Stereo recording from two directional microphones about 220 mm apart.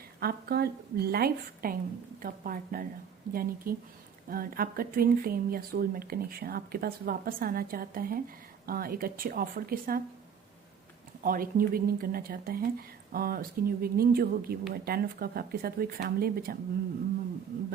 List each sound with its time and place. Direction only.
0.2 s speech: 45° right (ahead or behind)
11.2 s speech: 40° right (ahead or behind)